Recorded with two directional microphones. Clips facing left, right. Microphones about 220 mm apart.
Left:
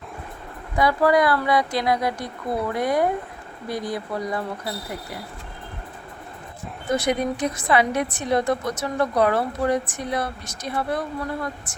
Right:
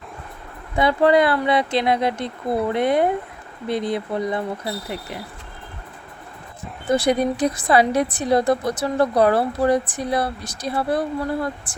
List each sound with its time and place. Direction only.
0.8 s speech: 25° right (ahead or behind)
6.9 s a woman's voice: 30° right (ahead or behind)